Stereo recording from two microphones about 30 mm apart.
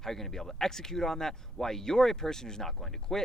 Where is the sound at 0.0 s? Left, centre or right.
Centre.